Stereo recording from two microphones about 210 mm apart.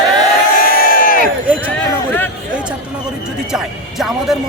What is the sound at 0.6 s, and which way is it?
Crowd, 45° left (ahead or behind).